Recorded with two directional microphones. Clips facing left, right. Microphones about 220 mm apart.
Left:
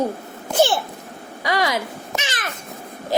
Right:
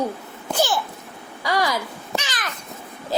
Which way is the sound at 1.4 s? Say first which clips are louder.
Left 1 dB; 20° left (ahead or behind).